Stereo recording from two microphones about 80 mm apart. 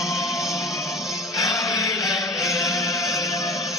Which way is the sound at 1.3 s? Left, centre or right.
Left.